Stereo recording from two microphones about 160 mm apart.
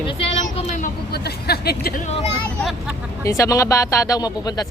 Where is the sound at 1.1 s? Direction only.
80° left.